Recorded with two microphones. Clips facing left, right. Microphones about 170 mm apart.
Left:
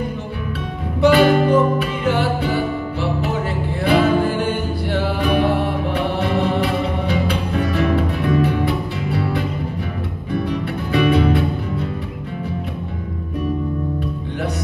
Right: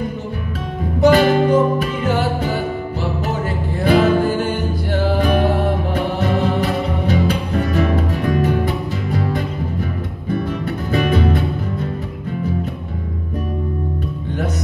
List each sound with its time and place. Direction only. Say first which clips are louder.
1.0 s music: even; 40° right (ahead or behind)
3.8 s music: right 2 dB; 45° right (ahead or behind)
10.4 s music: even; 45° right (ahead or behind)